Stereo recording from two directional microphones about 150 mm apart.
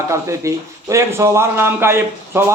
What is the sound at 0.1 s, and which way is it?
A man's voice, 20° right (ahead or behind).